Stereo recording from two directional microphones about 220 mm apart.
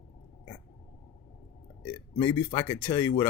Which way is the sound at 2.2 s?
15° left (ahead or behind).